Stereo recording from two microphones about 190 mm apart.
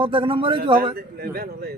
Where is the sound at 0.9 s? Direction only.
55° right (ahead or behind).